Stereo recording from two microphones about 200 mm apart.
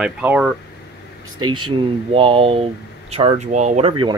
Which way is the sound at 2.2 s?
25° right (ahead or behind).